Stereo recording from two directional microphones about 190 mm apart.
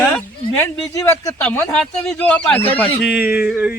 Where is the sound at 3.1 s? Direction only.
10° right (ahead or behind).